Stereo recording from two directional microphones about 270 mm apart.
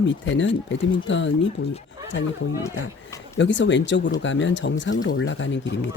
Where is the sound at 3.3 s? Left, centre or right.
Left.